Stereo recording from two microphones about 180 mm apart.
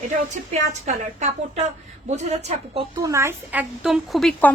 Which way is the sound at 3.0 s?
15° right (ahead or behind).